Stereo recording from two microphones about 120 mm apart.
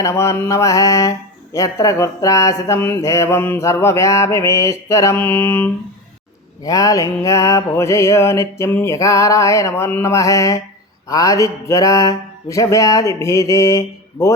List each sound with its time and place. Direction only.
0.0 s mantra: 25° left (ahead or behind)
6.7 s mantra: 30° left (ahead or behind)